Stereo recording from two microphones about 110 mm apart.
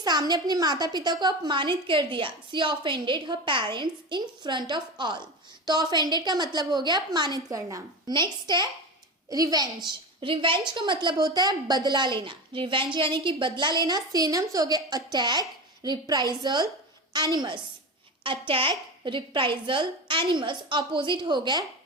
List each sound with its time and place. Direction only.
0.0 s a woman's voice: 40° right (ahead or behind)
10.2 s a woman's voice: 50° right (ahead or behind)
18.2 s a woman's voice: 50° right (ahead or behind)